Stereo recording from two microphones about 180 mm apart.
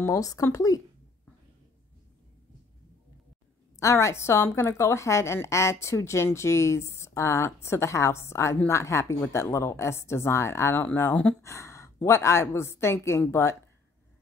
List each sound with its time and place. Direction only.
0.0 s speech: 20° left (ahead or behind)
3.8 s a woman's voice: 15° left (ahead or behind)